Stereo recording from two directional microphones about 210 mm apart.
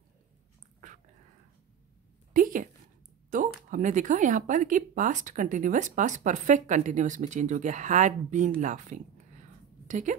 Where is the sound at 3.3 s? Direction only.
40° right (ahead or behind).